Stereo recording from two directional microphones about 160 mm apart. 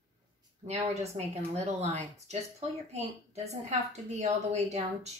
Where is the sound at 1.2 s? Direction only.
40° right (ahead or behind).